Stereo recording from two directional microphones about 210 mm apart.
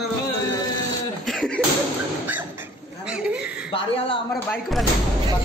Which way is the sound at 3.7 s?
25° left (ahead or behind).